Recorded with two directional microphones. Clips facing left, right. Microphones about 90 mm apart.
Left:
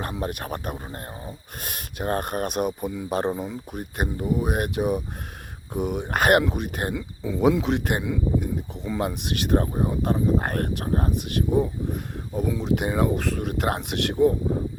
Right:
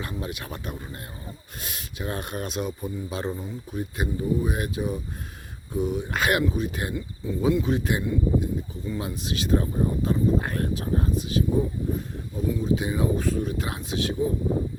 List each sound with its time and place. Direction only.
0.0 s speech: 50° left (ahead or behind); by 3.1 s 75° left (ahead or behind)
3.1 s speech: 55° left (ahead or behind)
6.4 s speech: 65° left (ahead or behind)
6.9 s speech: 90° left; by 8.2 s 75° left (ahead or behind)
8.7 s speech: 90° left
9.0 s speech: 60° left (ahead or behind)